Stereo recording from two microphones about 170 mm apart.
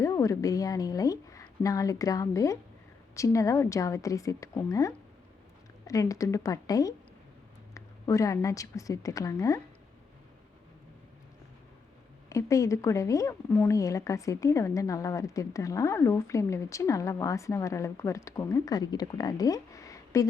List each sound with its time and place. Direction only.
0.0 s a woman's voice: 15° left (ahead or behind)
12.3 s speech: 20° left (ahead or behind)